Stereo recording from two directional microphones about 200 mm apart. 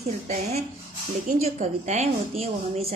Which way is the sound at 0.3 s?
35° right (ahead or behind).